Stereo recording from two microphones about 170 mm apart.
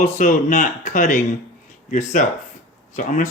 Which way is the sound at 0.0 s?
45° left (ahead or behind).